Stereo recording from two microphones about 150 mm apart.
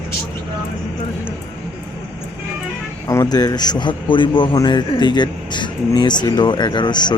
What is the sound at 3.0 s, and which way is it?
A man's voice, 25° left (ahead or behind).